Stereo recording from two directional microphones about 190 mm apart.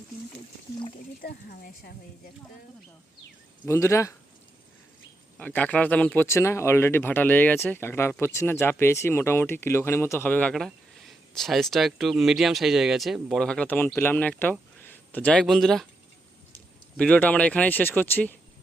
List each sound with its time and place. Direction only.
1.2 s speech: 50° left (ahead or behind)
3.7 s speech: 15° left (ahead or behind)
5.4 s speech: 10° left (ahead or behind)
17.0 s speech: 10° left (ahead or behind)